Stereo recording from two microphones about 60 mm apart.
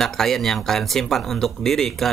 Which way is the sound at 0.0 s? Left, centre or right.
Centre.